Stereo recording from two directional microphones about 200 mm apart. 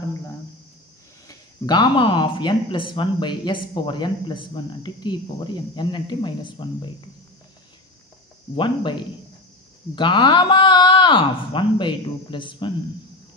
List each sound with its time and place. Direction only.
1.2 s speech: 20° left (ahead or behind)
8.5 s speech: 25° left (ahead or behind)